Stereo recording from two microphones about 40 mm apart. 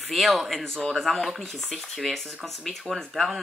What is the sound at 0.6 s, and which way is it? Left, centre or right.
Speech, centre.